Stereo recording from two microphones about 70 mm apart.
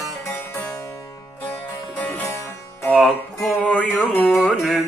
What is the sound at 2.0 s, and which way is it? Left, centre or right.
Music, left.